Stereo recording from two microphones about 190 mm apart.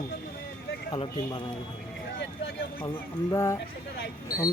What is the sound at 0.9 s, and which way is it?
Speech, 25° left (ahead or behind).